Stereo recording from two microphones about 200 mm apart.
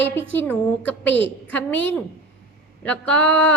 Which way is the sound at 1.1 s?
60° left (ahead or behind).